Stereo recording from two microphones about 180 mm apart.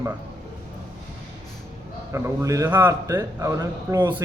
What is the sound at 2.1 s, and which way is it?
A man's voice, 15° right (ahead or behind).